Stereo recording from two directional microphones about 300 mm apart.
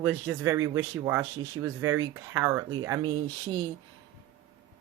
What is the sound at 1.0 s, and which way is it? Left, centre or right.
Speech, centre.